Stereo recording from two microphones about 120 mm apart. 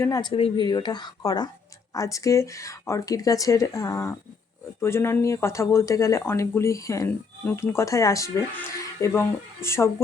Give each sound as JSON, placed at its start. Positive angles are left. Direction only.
{"t": 0.2, "sound": "speech", "side_deg": 45}
{"t": 0.6, "sound": "speech", "side_deg": 35}